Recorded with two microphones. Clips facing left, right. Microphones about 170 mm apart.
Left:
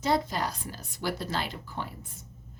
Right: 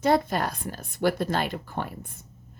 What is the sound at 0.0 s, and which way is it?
A woman's voice, 55° right (ahead or behind).